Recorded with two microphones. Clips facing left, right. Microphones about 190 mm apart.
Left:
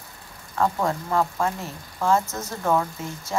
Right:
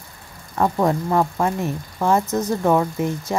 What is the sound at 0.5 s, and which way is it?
Speech, 20° right (ahead or behind).